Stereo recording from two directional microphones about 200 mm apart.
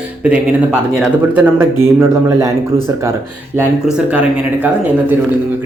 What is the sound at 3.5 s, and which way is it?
Speech, 5° right (ahead or behind).